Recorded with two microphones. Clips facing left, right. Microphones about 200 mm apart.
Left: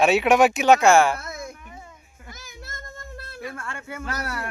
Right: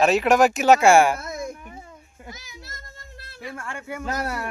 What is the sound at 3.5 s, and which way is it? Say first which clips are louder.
Speech: right 2 dB; 15° right (ahead or behind).